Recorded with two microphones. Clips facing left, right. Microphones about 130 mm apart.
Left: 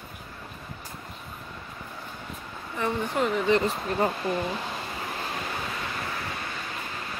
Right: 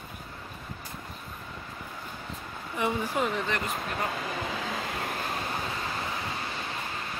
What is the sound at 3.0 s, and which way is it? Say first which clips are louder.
Speech: left 3 dB; 5° right (ahead or behind).